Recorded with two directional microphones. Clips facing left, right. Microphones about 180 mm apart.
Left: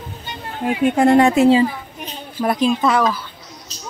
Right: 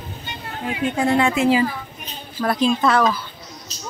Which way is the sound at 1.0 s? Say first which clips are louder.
Left 6 dB; 45° left (ahead or behind).